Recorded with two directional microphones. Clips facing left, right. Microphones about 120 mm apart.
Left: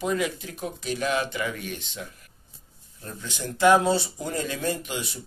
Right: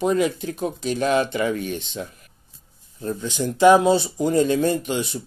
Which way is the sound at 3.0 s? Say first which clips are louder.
Right 10 dB; 20° right (ahead or behind).